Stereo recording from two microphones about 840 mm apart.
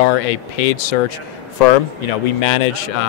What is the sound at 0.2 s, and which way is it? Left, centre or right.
Speech, left.